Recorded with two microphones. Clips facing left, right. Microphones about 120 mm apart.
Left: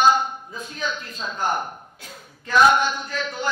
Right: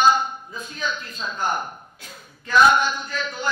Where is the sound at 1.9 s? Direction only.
50° left (ahead or behind).